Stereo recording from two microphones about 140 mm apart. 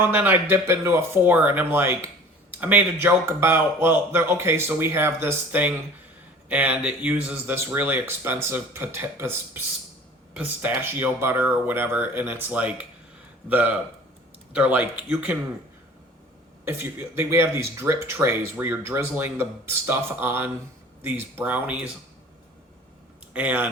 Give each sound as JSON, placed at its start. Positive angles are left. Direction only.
{"t": 0.1, "sound": "speech", "side_deg": -15}
{"t": 16.6, "sound": "speech", "side_deg": -15}
{"t": 23.3, "sound": "speech", "side_deg": -10}